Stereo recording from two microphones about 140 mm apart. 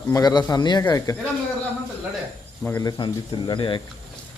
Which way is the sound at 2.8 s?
30° left (ahead or behind).